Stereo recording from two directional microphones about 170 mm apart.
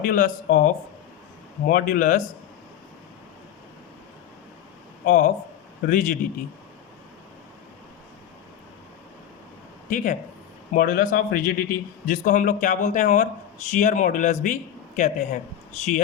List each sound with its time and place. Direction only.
0.0 s a man's voice: 55° left (ahead or behind)
5.0 s a man's voice: 50° left (ahead or behind)
9.9 s a man's voice: 50° left (ahead or behind)